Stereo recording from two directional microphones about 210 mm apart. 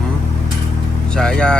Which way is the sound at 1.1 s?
5° left (ahead or behind).